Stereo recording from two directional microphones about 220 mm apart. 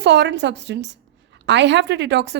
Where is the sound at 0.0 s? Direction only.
50° right (ahead or behind).